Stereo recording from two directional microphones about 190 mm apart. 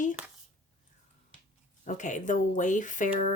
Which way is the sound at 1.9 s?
40° left (ahead or behind).